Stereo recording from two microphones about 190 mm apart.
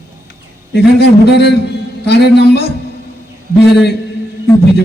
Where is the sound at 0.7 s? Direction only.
60° left (ahead or behind).